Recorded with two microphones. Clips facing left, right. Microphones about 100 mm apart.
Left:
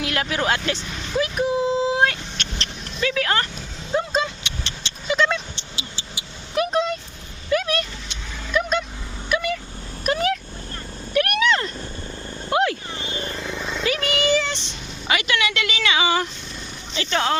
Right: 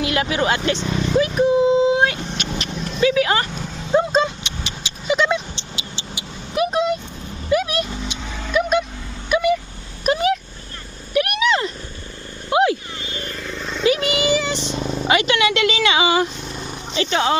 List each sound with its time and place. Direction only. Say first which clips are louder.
0.0 s speech: right 4 dB; 5° right (ahead or behind)
1.2 s a sound: right 5 dB; centre (ahead or behind)
2.4 s vehicle: right 6 dB; 10° right (ahead or behind)
3.9 s vehicle: right 6 dB; 30° right (ahead or behind)
4.6 s vehicle: right 4 dB; 15° right (ahead or behind)
6.7 s vehicle: right 3 dB; 10° right (ahead or behind)
13.0 s vehicle: left 1 dB; 30° left (ahead or behind)
13.8 s a sound: right 4 dB; 20° right (ahead or behind)
15.0 s a sound: right 5 dB; 30° right (ahead or behind); by 16.3 s 15° right (ahead or behind)
17.1 s speech: right 2 dB; 5° right (ahead or behind)